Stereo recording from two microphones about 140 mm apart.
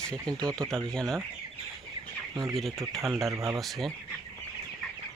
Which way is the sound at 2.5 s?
Centre (ahead or behind).